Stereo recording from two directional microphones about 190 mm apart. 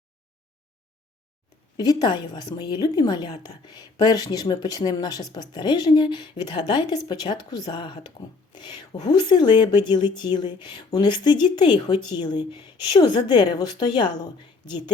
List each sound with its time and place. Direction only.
1.7 s speech: 20° left (ahead or behind)